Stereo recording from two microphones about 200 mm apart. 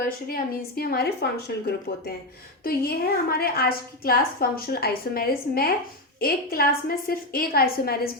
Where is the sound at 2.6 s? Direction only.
50° left (ahead or behind).